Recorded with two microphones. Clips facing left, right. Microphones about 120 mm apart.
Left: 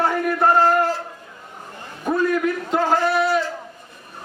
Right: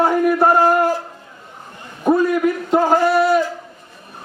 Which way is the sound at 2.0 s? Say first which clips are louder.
Right 6 dB; 25° right (ahead or behind).